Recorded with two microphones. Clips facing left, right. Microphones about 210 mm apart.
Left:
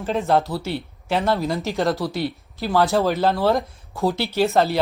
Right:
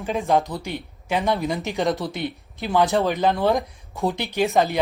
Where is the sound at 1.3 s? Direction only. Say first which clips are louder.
Left 2 dB; centre (ahead or behind).